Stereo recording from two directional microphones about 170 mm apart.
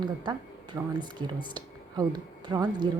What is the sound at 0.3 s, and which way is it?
A woman's voice, 25° right (ahead or behind).